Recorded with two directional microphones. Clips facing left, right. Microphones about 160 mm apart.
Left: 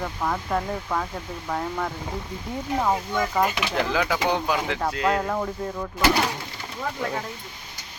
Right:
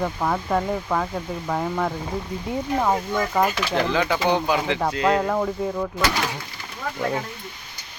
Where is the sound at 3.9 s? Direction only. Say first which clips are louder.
Right 2 dB; centre (ahead or behind).